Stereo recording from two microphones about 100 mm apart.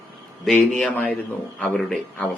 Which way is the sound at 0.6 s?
10° left (ahead or behind).